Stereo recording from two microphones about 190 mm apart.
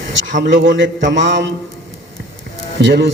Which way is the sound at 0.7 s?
75° right (ahead or behind).